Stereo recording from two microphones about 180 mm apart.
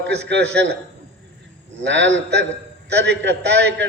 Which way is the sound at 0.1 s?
70° right (ahead or behind).